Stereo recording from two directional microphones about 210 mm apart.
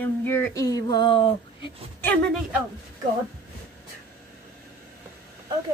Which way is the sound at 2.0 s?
5° left (ahead or behind).